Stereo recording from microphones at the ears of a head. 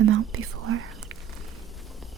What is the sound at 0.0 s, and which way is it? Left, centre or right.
Whispering, right.